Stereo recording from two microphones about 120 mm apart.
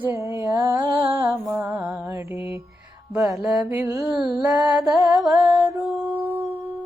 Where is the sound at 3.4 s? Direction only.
5° right (ahead or behind).